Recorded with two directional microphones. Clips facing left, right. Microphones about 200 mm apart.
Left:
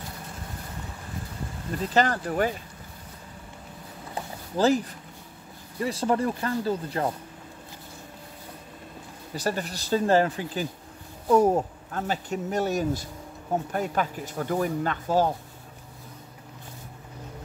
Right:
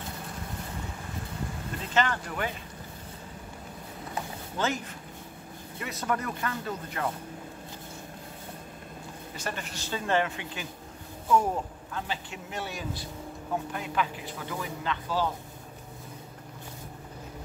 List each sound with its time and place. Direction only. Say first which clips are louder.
2.0 s speech: left 5 dB; 40° left (ahead or behind)
4.6 s speech: left 9 dB; 35° left (ahead or behind)
9.3 s speech: left 8 dB; 35° left (ahead or behind)